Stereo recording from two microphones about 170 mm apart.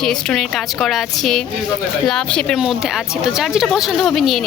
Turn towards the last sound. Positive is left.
turn(degrees=0)  # may be behind; listen again after turning